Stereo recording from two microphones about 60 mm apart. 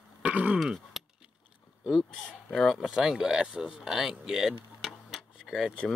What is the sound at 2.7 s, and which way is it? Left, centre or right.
Speech, centre.